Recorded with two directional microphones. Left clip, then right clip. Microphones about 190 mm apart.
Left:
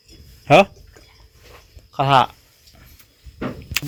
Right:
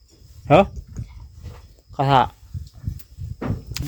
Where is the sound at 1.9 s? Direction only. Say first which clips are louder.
Left 2 dB; 20° right (ahead or behind).